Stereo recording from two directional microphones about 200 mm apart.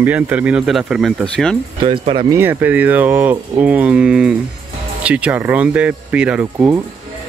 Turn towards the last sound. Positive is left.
turn(degrees=-10)  # may be behind; listen again after turning